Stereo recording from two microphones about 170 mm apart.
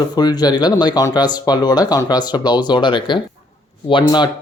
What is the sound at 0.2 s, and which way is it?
Speech, 25° left (ahead or behind).